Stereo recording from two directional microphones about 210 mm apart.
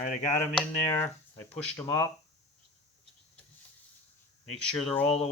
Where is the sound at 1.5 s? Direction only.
15° left (ahead or behind).